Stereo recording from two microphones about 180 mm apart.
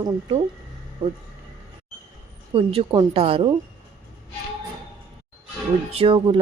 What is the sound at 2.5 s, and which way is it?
Speech, 30° right (ahead or behind).